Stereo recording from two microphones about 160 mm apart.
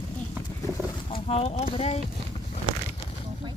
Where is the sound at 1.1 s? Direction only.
40° left (ahead or behind).